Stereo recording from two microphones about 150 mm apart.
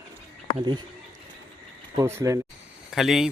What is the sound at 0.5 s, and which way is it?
Speech, 30° right (ahead or behind).